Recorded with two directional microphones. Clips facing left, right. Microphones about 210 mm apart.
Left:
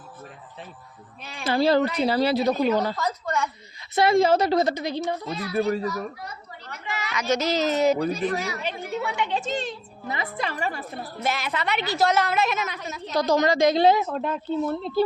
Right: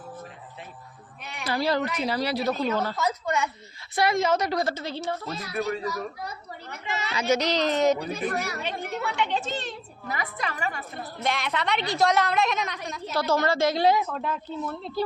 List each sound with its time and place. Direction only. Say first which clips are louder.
1.2 s a woman's voice: left 5 dB; 30° left (ahead or behind); by 2.9 s 15° left (ahead or behind)
2.9 s a woman's voice: even; 10° right (ahead or behind)
3.9 s a woman's voice: left 5 dB; 30° left (ahead or behind)
4.7 s a woman's voice: left 4 dB; 15° left (ahead or behind)
5.5 s a child's voice: left 5 dB; 35° left (ahead or behind)
6.8 s a woman's voice: even; 25° right (ahead or behind)
7.3 s a woman's voice: left 3 dB; 5° left (ahead or behind)
8.1 s a woman's voice: left 3 dB; 55° right (ahead or behind)
8.6 s a woman's voice: left 2 dB; 5° left (ahead or behind)
10.1 s a woman's voice: left 2 dB; 25° left (ahead or behind)
11.2 s a woman's voice: even; 5° left (ahead or behind)
13.1 s a woman's voice: left 3 dB; 15° left (ahead or behind); by 15.0 s 30° left (ahead or behind)